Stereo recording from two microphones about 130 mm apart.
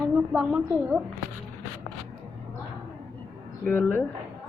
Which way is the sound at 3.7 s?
15° left (ahead or behind).